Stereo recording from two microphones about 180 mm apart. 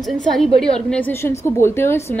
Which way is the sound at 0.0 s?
Centre (ahead or behind).